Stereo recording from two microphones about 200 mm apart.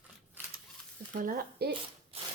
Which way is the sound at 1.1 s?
45° right (ahead or behind).